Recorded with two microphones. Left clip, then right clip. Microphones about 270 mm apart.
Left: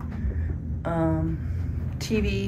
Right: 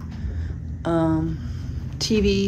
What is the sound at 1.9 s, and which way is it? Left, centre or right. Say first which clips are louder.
Speech: right 7 dB; centre.